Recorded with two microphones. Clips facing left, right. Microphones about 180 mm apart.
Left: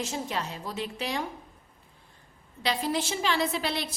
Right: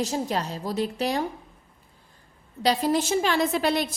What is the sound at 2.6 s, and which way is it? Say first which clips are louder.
A woman's voice: right 6 dB; 40° right (ahead or behind).